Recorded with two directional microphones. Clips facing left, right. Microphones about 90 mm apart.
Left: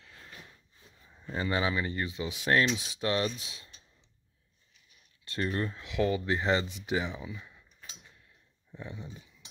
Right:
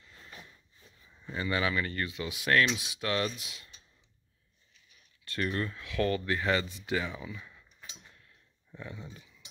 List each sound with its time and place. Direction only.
1.3 s speech: 30° left (ahead or behind)
5.2 s speech: 25° left (ahead or behind)
6.3 s speech: 25° left (ahead or behind)
8.7 s speech: 15° left (ahead or behind)